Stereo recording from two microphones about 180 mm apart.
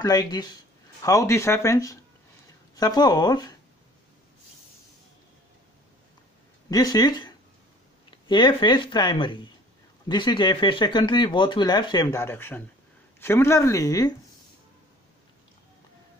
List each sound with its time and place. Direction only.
0.0 s speech: 20° left (ahead or behind)
6.7 s speech: 20° left (ahead or behind)